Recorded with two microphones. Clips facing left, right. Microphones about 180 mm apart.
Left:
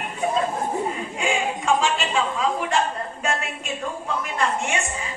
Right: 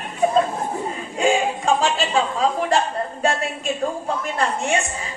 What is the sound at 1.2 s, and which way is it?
Speech, 35° right (ahead or behind).